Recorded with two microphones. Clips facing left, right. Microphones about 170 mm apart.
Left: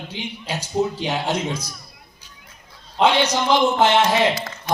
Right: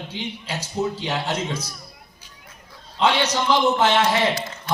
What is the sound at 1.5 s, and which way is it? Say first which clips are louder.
Speech: left 1 dB; 10° right (ahead or behind).